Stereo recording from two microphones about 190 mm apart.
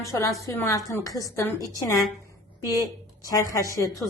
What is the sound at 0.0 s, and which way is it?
A woman's voice, 15° left (ahead or behind).